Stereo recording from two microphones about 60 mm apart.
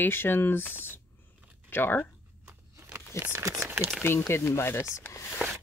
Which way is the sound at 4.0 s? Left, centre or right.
Left.